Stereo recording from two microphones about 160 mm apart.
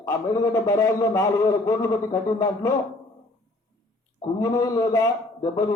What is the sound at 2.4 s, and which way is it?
Speech, 25° left (ahead or behind).